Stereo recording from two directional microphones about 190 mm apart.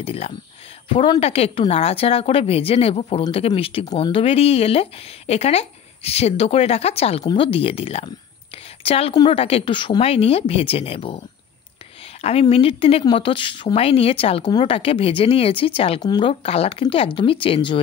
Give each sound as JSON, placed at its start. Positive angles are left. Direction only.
{"t": 0.0, "sound": "a woman's voice", "side_deg": 30}